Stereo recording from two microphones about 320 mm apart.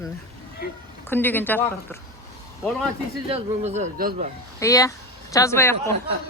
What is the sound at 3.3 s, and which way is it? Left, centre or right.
Speech, centre.